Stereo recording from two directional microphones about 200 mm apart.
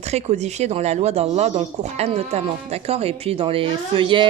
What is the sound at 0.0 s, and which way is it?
A child's voice, 35° right (ahead or behind).